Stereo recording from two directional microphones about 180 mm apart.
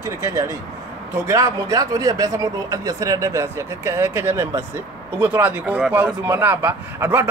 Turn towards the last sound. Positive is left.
turn(degrees=-15)  # may be behind; listen again after turning